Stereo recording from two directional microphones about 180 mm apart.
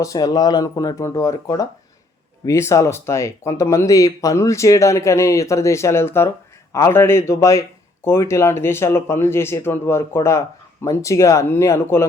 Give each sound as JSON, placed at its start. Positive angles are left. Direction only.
{"t": 0.0, "sound": "speech", "side_deg": 20}